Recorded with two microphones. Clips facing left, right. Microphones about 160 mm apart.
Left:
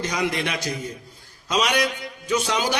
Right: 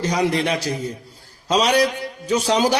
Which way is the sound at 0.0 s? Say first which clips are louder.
Right 5 dB; 35° right (ahead or behind).